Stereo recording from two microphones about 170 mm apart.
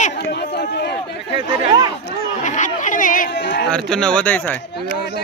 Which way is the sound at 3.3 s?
90° left.